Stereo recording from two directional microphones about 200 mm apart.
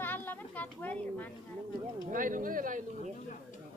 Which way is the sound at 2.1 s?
45° right (ahead or behind).